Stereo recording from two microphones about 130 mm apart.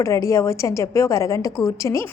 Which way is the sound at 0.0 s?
25° left (ahead or behind).